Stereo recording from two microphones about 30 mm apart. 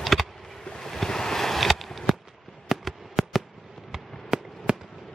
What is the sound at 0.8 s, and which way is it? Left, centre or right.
Vehicle, centre.